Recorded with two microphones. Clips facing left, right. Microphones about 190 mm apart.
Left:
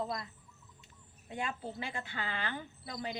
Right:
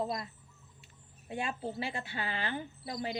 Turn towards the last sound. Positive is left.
turn(degrees=-25)  # may be behind; listen again after turning